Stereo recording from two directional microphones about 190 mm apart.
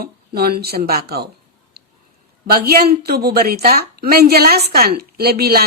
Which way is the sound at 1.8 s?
55° right (ahead or behind).